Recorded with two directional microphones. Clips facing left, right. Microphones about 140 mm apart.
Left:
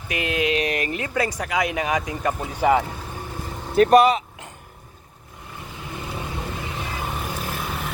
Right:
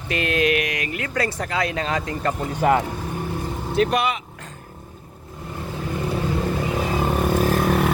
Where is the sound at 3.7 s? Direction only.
40° left (ahead or behind).